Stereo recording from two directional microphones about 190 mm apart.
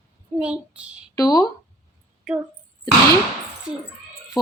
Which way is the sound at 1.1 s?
20° left (ahead or behind).